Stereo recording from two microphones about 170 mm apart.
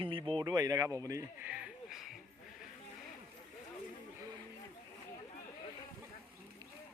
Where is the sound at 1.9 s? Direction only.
Centre (ahead or behind).